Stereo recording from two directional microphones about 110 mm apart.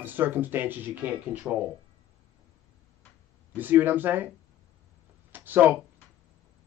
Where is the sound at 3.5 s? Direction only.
20° right (ahead or behind).